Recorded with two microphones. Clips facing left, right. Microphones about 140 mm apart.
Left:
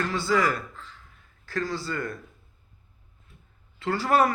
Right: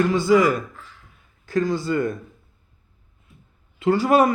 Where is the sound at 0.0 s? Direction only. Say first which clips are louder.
Right 8 dB; 15° right (ahead or behind).